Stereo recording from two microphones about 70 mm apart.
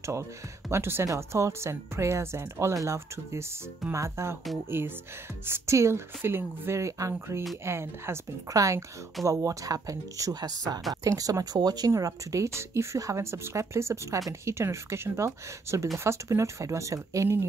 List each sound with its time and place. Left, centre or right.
0.0 s speech: right
1.0 s speech: right
4.6 s a woman's voice: right
5.5 s a woman's voice: right
6.8 s a woman's voice: right
8.5 s speech: right
10.3 s speech: right
11.9 s speech: right